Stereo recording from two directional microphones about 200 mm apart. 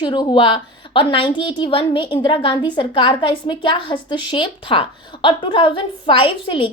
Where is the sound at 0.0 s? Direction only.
25° left (ahead or behind).